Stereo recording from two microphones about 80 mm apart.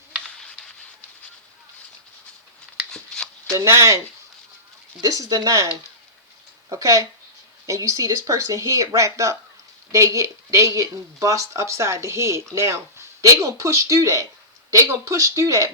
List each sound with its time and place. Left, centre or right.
0.3 s a sound: centre
3.5 s speech: right
4.9 s speech: right
6.7 s speech: right